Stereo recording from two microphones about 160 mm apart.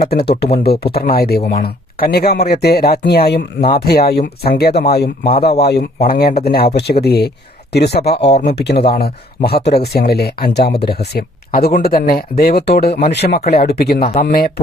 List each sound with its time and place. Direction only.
0.0 s speech: 80° left
1.0 s speech: 70° left (ahead or behind)
5.2 s speech: 35° left (ahead or behind)
6.1 s speech: 70° left (ahead or behind)
7.0 s speech: 85° left
8.7 s speech: 35° left (ahead or behind)
9.0 s speech: 75° left (ahead or behind)
13.1 s speech: 80° left
14.2 s speech: 70° left (ahead or behind)